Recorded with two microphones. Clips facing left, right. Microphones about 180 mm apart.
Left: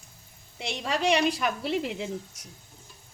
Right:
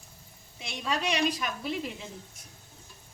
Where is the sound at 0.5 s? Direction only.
70° left (ahead or behind).